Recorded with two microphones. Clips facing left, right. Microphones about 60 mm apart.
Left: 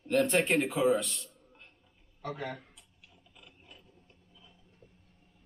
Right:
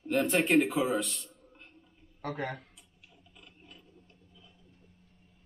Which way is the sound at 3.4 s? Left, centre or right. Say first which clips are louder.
Right 1 dB; centre.